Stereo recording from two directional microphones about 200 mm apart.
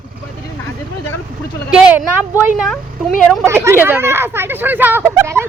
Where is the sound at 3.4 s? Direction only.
10° right (ahead or behind).